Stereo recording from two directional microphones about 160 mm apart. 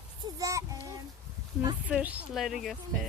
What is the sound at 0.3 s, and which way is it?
Child singing, 20° right (ahead or behind).